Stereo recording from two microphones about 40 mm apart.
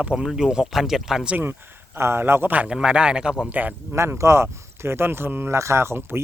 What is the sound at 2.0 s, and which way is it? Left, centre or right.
Speech, right.